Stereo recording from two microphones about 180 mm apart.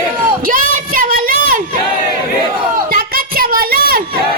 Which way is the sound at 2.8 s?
55° right (ahead or behind).